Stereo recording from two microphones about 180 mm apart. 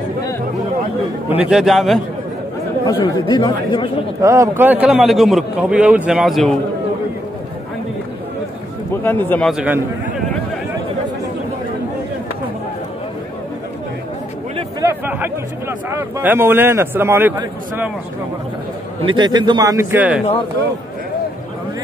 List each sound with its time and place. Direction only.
1.5 s a man's voice: centre (ahead or behind)
2.8 s speech: 20° left (ahead or behind)
4.2 s a man's voice: 20° right (ahead or behind); by 6.5 s centre (ahead or behind)
9.0 s speech: 10° left (ahead or behind)
9.5 s a man's voice: 10° right (ahead or behind)
14.8 s chatter: 15° right (ahead or behind)
15.9 s a man's voice: 10° right (ahead or behind)
19.0 s speech: 25° right (ahead or behind); by 20.2 s 5° right (ahead or behind)